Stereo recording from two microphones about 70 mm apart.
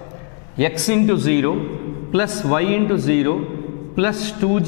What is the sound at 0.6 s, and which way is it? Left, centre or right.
A man's voice, centre.